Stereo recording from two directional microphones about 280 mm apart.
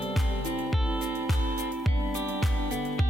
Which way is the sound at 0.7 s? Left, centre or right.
Centre.